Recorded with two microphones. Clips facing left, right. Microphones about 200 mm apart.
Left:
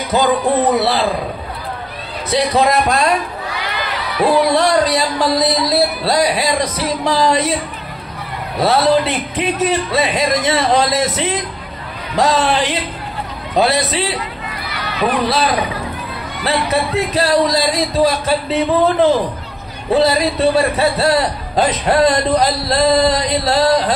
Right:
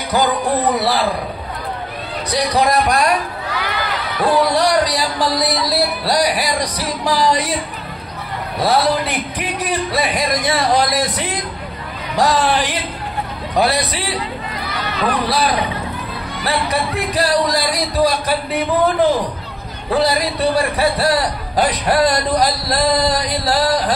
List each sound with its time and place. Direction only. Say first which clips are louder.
0.1 s a man's voice: left 2 dB; 25° left (ahead or behind)
2.3 s a man's voice: left 2 dB; 25° left (ahead or behind)
4.5 s a man's voice: left 2 dB; 25° left (ahead or behind)
8.5 s a man's voice: left 3 dB; 25° left (ahead or behind)
15.2 s a man's voice: left 2 dB; 25° left (ahead or behind)
16.6 s a man's voice: left 3 dB; 25° left (ahead or behind)